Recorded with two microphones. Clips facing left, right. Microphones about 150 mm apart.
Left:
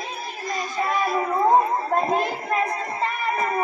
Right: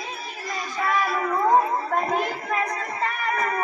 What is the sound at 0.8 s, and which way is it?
Music, 25° left (ahead or behind).